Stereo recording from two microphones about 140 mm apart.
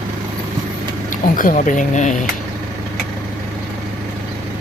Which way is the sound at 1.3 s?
75° left (ahead or behind).